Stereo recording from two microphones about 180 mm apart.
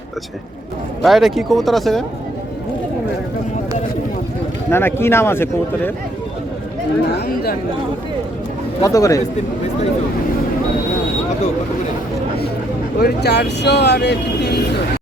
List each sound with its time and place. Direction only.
1.0 s speech: centre (ahead or behind)
4.7 s speech: 15° left (ahead or behind)
8.8 s a man's voice: 20° left (ahead or behind)
13.0 s speech: 60° left (ahead or behind)